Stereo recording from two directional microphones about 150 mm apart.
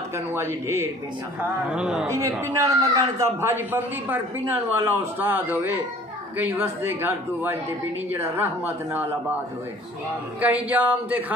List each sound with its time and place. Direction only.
0.1 s a man's voice: 15° right (ahead or behind)
1.7 s a man's voice: 5° right (ahead or behind)
2.0 s a man's voice: 20° right (ahead or behind)
10.4 s a man's voice: 10° right (ahead or behind)